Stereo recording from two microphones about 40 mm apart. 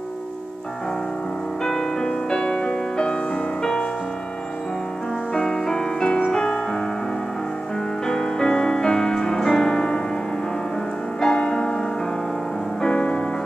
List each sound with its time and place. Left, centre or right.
1.6 s music: centre
5.3 s music: centre
8.1 s music: centre
11.1 s music: centre
12.8 s music: left